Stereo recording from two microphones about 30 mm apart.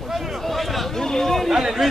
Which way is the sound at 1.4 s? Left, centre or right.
Centre.